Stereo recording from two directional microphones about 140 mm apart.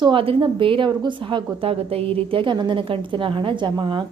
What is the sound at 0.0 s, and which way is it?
A woman's voice, 40° right (ahead or behind).